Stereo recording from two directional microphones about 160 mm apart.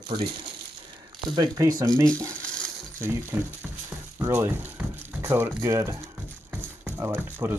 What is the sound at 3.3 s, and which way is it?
Speech, 15° right (ahead or behind).